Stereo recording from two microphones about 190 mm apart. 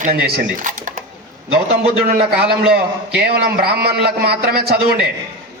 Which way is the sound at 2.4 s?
55° right (ahead or behind).